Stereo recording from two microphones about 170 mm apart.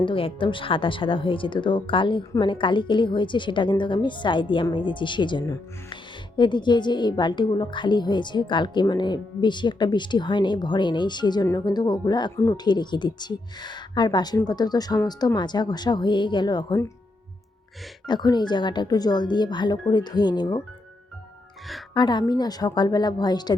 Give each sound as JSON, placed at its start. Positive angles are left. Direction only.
{"t": 0.0, "sound": "speech", "side_deg": 30}
{"t": 18.0, "sound": "speech", "side_deg": 25}
{"t": 21.9, "sound": "speech", "side_deg": 25}